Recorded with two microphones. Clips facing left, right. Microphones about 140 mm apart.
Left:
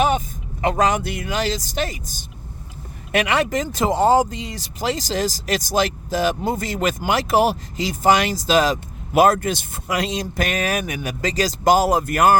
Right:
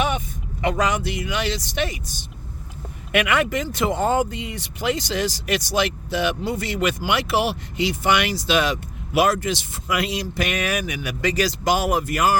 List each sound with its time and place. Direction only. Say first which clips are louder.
0.6 s speech: left 3 dB; 45° left (ahead or behind)
3.1 s speech: left 1 dB; 30° left (ahead or behind)
12.0 s speech: left 4 dB; 50° left (ahead or behind)